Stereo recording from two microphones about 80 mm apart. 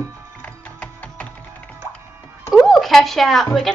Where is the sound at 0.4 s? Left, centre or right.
Centre.